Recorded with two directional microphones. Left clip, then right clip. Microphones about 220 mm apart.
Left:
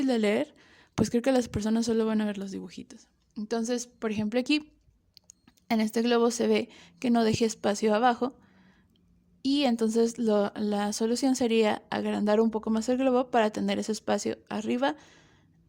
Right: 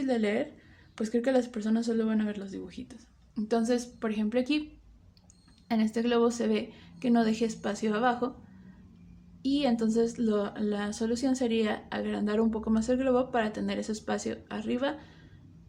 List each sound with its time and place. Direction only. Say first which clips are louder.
0.0 s a woman's voice: left 3 dB; 50° left (ahead or behind)
5.6 s a woman's voice: left 3 dB; 45° left (ahead or behind)
9.4 s a woman's voice: left 2 dB; 45° left (ahead or behind)